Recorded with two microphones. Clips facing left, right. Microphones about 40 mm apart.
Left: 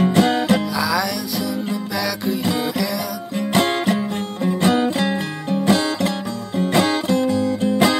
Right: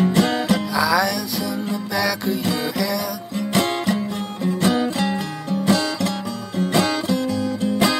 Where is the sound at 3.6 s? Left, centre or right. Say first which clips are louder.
Left 2 dB; left.